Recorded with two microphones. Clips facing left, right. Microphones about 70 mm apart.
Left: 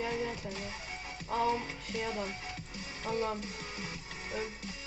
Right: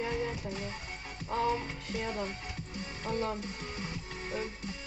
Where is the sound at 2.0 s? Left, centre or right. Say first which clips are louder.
Even; centre.